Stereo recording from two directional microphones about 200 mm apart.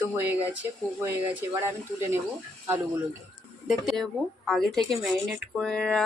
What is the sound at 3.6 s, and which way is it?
Speech, centre (ahead or behind).